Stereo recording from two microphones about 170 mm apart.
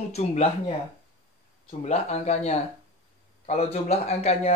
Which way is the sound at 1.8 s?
40° left (ahead or behind).